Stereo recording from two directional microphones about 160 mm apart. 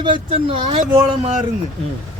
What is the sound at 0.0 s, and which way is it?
Speech, 30° right (ahead or behind).